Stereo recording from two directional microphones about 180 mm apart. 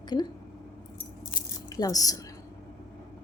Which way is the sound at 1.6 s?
20° left (ahead or behind).